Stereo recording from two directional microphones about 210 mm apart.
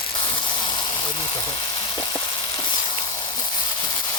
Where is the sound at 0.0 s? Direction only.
25° left (ahead or behind).